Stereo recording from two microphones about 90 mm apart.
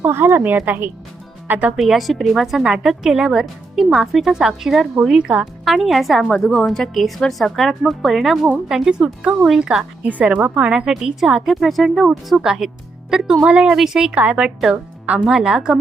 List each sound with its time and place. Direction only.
0.0 s a woman's voice: 25° right (ahead or behind)
1.7 s a woman's voice: 5° right (ahead or behind)